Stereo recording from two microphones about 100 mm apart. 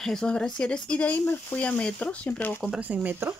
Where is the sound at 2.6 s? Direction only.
15° right (ahead or behind).